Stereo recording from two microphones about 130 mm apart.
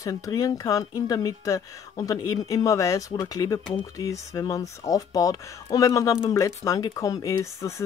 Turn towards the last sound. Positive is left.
turn(degrees=30)  # may be behind; listen again after turning